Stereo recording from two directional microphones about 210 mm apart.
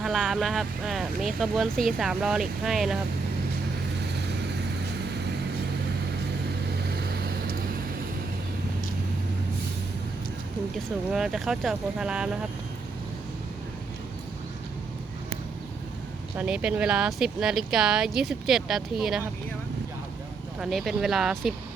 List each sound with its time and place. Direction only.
0.0 s speech: centre (ahead or behind)
6.9 s vehicle: 50° right (ahead or behind)
10.8 s speech: centre (ahead or behind)
16.4 s speech: 5° right (ahead or behind)
20.6 s speech: centre (ahead or behind)